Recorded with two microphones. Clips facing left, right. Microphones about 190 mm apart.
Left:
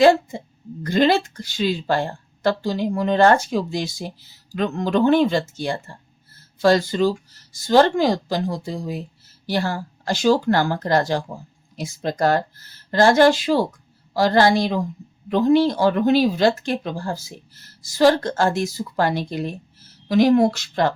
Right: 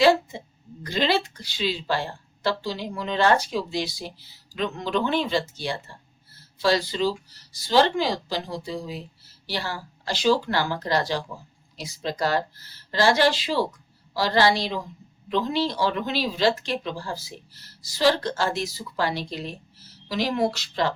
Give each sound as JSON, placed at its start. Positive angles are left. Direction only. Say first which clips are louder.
{"t": 0.0, "sound": "speech", "louder": "left 4 dB", "side_deg": 50}